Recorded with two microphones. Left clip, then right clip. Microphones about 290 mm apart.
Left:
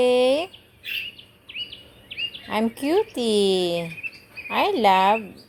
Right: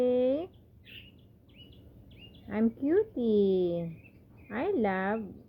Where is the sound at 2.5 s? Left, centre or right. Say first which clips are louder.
Left 5 dB; left.